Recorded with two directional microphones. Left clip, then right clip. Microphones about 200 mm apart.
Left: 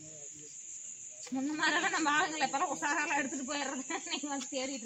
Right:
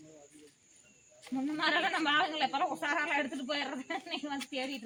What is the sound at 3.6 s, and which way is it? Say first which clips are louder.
Speech: even; 35° right (ahead or behind).